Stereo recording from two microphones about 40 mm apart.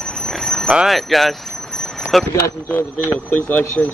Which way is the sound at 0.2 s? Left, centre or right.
Centre.